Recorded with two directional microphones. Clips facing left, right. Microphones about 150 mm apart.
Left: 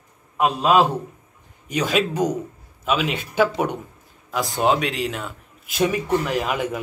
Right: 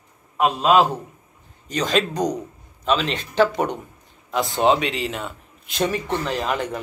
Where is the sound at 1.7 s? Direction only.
10° left (ahead or behind).